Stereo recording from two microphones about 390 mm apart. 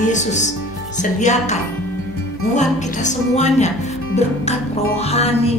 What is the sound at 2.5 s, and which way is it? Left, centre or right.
Speech, centre.